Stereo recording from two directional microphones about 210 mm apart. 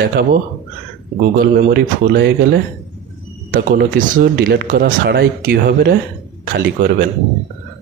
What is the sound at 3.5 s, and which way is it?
Speech, 45° right (ahead or behind).